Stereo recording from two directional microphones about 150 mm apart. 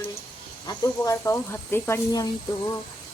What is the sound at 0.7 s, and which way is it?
Speech, 20° left (ahead or behind).